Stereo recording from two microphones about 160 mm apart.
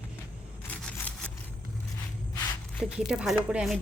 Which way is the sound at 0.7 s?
10° left (ahead or behind).